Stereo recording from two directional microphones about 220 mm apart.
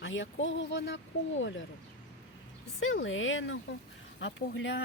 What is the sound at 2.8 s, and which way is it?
Speech, 60° left (ahead or behind).